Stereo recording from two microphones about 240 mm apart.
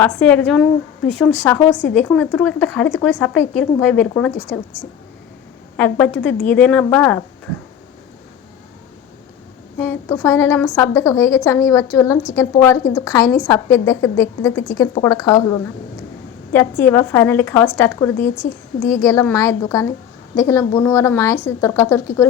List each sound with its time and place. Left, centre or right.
0.0 s speech: centre
5.7 s a woman's voice: centre
9.7 s a woman's voice: centre